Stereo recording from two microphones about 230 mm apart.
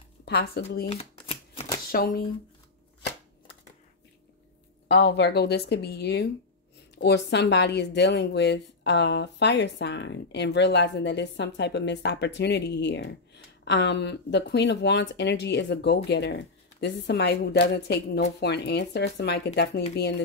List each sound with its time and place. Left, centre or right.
0.2 s speech: left
0.8 s shuffling cards: left
1.9 s speech: left
4.8 s speech: left